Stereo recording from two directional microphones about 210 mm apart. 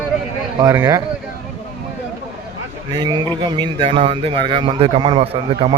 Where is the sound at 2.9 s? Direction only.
20° right (ahead or behind).